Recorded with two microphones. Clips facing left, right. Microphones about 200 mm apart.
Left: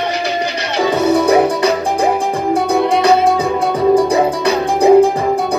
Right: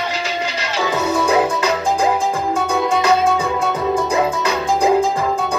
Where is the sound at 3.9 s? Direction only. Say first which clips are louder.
Left 6 dB; 35° left (ahead or behind).